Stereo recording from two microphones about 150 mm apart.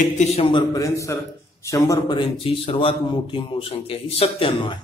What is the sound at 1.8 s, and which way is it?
A man's voice, 30° left (ahead or behind).